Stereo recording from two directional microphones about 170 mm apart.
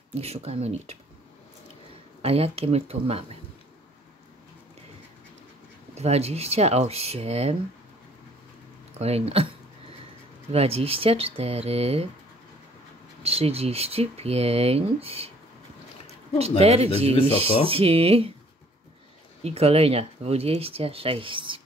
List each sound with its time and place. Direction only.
0.1 s speech: 40° right (ahead or behind)
2.2 s speech: 35° right (ahead or behind)
5.9 s speech: 40° right (ahead or behind)
8.9 s speech: 40° right (ahead or behind)
10.5 s speech: 35° right (ahead or behind)
13.2 s speech: 35° right (ahead or behind)
16.3 s speech: 35° right (ahead or behind)
19.4 s speech: 35° right (ahead or behind)